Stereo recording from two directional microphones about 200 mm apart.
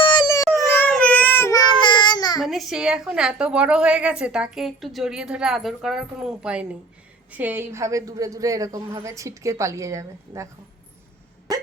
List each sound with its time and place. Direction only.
0.0 s a sound: 20° left (ahead or behind)
0.7 s baby cry: 10° left (ahead or behind)
2.4 s a woman's voice: centre (ahead or behind)